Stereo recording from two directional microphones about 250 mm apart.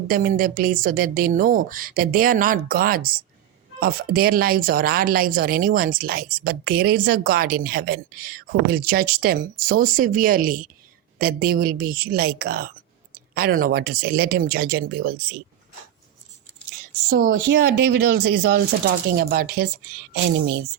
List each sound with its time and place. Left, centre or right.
0.1 s a woman's voice: right
17.2 s speech: right
17.6 s a woman's voice: right